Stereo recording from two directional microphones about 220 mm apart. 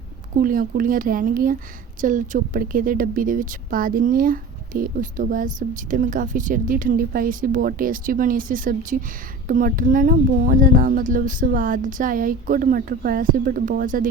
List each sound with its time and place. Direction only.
0.3 s speech: 40° right (ahead or behind)